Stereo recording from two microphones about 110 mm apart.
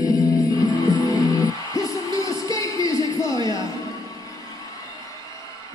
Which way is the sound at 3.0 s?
30° left (ahead or behind).